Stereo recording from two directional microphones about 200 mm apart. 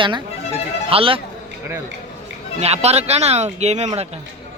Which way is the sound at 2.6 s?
30° right (ahead or behind).